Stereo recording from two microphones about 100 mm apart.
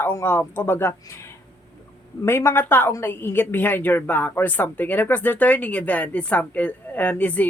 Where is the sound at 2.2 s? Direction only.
25° left (ahead or behind).